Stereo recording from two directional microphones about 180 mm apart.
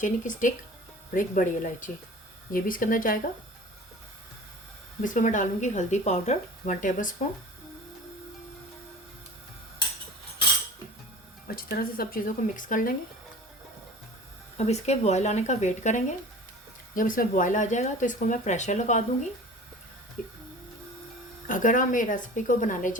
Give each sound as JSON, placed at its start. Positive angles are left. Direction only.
{"t": 0.0, "sound": "speech", "side_deg": 45}
{"t": 5.0, "sound": "speech", "side_deg": 45}
{"t": 11.4, "sound": "speech", "side_deg": 55}
{"t": 14.6, "sound": "speech", "side_deg": 40}
{"t": 20.2, "sound": "speech", "side_deg": 45}
{"t": 21.4, "sound": "speech", "side_deg": 45}